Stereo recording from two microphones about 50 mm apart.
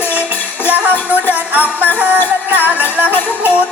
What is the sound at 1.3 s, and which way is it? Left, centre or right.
Jingle bell, right.